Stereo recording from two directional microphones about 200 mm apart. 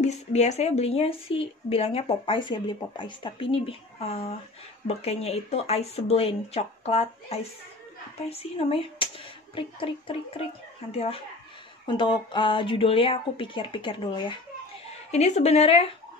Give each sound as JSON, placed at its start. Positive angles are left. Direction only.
{"t": 0.0, "sound": "speech", "side_deg": 35}